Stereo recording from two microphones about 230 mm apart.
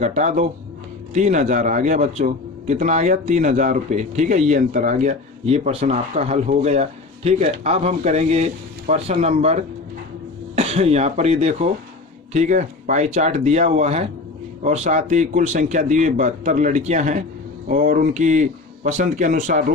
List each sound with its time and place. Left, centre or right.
0.0 s a man's voice: right